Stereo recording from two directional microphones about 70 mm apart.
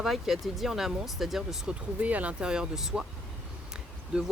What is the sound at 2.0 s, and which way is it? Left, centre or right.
Speech, right.